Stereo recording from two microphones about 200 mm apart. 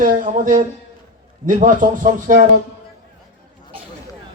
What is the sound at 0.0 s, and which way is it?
Speech, 45° right (ahead or behind).